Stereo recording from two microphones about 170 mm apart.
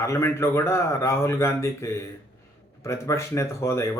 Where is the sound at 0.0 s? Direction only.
15° left (ahead or behind).